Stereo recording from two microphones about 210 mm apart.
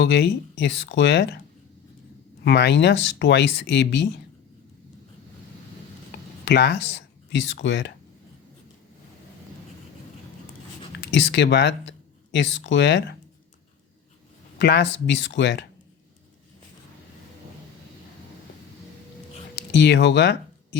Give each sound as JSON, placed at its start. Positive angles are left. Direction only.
{"t": 0.0, "sound": "speech", "side_deg": 55}
{"t": 2.4, "sound": "speech", "side_deg": 50}
{"t": 6.4, "sound": "speech", "side_deg": 50}
{"t": 11.0, "sound": "speech", "side_deg": 55}
{"t": 14.6, "sound": "speech", "side_deg": 55}
{"t": 19.5, "sound": "speech", "side_deg": 55}